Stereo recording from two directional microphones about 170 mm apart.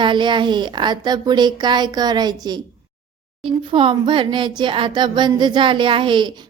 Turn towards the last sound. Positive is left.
turn(degrees=-30)  # may be behind; listen again after turning